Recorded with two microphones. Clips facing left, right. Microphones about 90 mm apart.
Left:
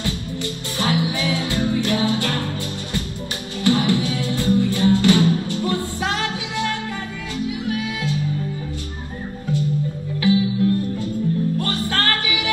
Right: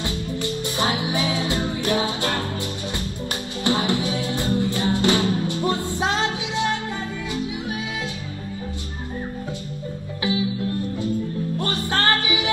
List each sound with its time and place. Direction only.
0.0 s music: 20° right (ahead or behind)
3.6 s music: 20° right (ahead or behind)
10.2 s music: 20° right (ahead or behind)